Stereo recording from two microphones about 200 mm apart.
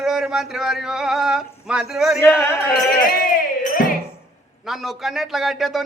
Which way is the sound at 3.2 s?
45° left (ahead or behind).